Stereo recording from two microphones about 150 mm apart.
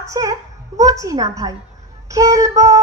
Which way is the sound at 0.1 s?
20° right (ahead or behind).